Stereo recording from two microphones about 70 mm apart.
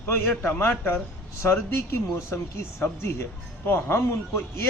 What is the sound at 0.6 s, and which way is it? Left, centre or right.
A man's voice, left.